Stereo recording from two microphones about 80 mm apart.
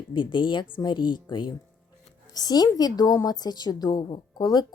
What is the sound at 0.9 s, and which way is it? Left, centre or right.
Speech, left.